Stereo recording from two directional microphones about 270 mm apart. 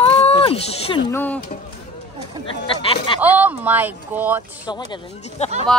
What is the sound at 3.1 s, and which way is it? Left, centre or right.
Speech, centre.